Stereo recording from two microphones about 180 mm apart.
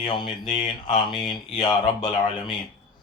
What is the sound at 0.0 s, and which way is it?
Speech, 25° left (ahead or behind).